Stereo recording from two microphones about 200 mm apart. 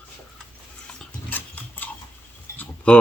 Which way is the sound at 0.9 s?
10° left (ahead or behind).